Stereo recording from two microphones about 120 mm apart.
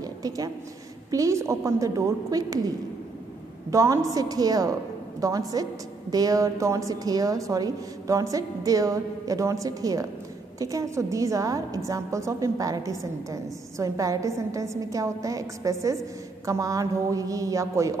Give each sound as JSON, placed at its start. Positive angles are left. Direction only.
{"t": 0.0, "sound": "a sound", "side_deg": -30}
{"t": 1.1, "sound": "a woman's voice", "side_deg": -25}
{"t": 3.7, "sound": "a woman's voice", "side_deg": -25}